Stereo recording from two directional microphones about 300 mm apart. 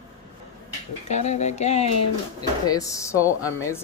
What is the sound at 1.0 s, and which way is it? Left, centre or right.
Speech, left.